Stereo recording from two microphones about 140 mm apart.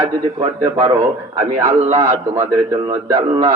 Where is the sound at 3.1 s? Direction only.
20° right (ahead or behind).